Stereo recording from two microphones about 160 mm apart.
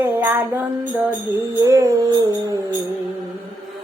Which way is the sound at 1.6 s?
20° right (ahead or behind).